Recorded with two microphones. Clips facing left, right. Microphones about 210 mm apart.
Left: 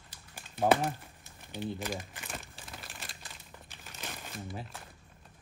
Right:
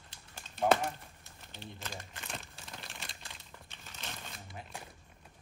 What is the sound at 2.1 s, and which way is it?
Crumpling, 5° left (ahead or behind).